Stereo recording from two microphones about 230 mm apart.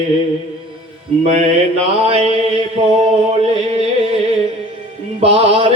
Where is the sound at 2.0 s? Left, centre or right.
Right.